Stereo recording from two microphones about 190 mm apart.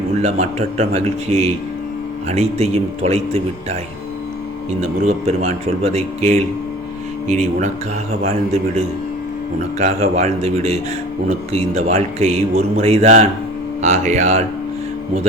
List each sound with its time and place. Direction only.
0.2 s a man's voice: 35° right (ahead or behind)
4.8 s a man's voice: 35° right (ahead or behind)